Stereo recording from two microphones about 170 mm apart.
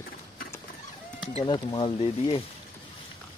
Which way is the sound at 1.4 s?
25° left (ahead or behind).